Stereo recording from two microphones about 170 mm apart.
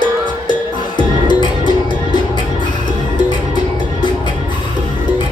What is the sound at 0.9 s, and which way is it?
Music, 25° left (ahead or behind).